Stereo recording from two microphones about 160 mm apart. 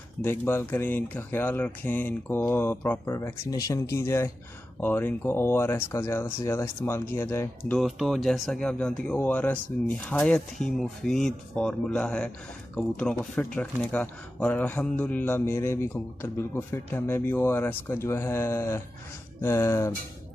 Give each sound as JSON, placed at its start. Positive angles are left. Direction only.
{"t": 0.2, "sound": "speech", "side_deg": 15}
{"t": 7.7, "sound": "speech", "side_deg": 0}